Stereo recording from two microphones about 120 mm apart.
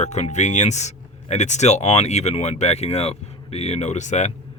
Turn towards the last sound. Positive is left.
turn(degrees=75)  # may be behind; listen again after turning